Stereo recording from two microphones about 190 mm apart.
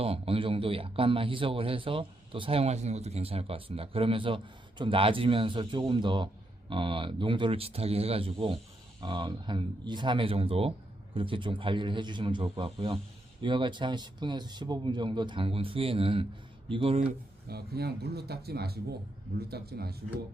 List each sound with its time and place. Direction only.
0.0 s speech: 30° right (ahead or behind)
17.5 s speech: 55° right (ahead or behind)